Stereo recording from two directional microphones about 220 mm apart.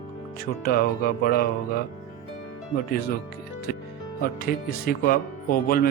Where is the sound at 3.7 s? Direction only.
45° left (ahead or behind).